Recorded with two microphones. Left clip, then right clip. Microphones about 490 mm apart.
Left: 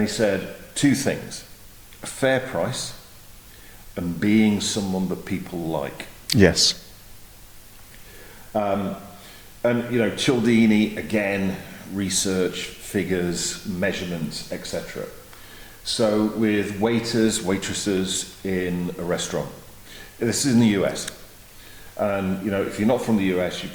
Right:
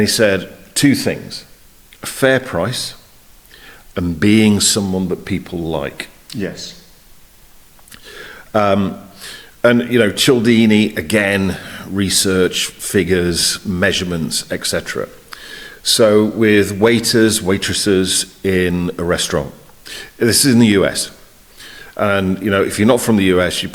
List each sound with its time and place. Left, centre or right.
0.0 s speech: right
2.0 s speech: right
3.9 s speech: right
6.2 s speech: left
9.6 s speech: right
15.8 s speech: right